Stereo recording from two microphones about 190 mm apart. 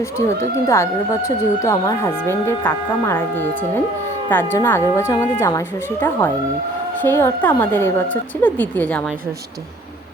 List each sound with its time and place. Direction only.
0.3 s speech: 15° left (ahead or behind)